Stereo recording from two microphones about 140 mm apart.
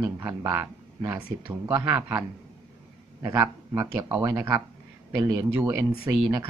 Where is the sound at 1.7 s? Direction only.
15° right (ahead or behind).